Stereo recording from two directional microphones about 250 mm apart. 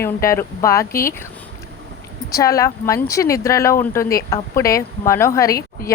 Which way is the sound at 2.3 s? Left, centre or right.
Centre.